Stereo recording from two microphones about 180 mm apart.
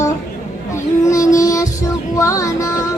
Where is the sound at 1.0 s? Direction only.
15° left (ahead or behind).